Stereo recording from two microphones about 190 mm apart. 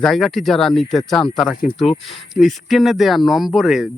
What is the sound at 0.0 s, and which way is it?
Speech, centre (ahead or behind).